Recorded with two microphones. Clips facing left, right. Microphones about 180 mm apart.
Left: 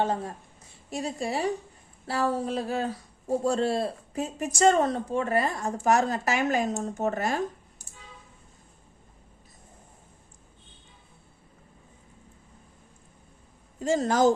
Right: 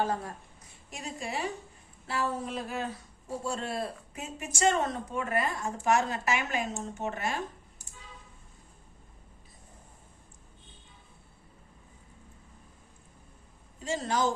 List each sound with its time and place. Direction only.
0.0 s a woman's voice: 25° left (ahead or behind); by 7.3 s 40° left (ahead or behind)
13.7 s speech: 45° left (ahead or behind)